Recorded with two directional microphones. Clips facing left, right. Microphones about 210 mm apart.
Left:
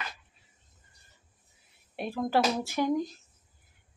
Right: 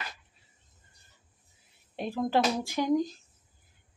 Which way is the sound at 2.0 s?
20° right (ahead or behind).